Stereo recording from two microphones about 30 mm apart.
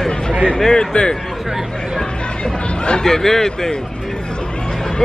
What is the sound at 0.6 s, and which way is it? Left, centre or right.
Speech, left.